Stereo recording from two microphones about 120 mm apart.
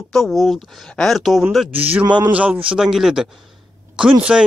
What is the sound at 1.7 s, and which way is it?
Speech, 15° right (ahead or behind).